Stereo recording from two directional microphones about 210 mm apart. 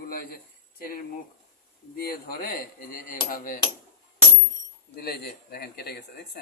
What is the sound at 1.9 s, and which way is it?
Speech, 45° left (ahead or behind).